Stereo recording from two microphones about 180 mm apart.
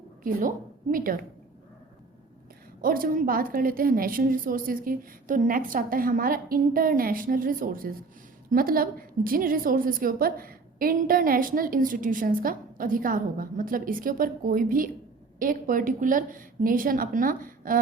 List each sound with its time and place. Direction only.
0.2 s a woman's voice: 50° right (ahead or behind)
2.8 s a woman's voice: 50° right (ahead or behind)